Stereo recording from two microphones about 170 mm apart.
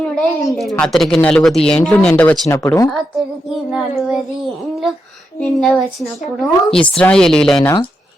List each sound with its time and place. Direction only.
0.2 s speech: centre (ahead or behind)
2.5 s speech: 20° left (ahead or behind)
3.7 s speech: centre (ahead or behind)
5.4 s speech: 5° left (ahead or behind)